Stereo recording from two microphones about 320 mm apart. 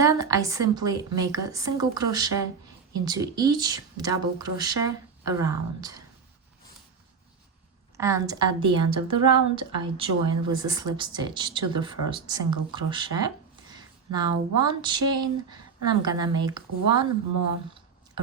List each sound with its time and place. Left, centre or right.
0.0 s speech: centre
7.9 s speech: centre